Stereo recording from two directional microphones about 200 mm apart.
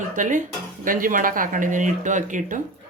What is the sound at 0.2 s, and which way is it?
Speech, 40° right (ahead or behind).